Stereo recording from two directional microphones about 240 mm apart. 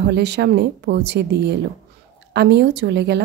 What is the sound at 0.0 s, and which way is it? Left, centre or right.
Speech, right.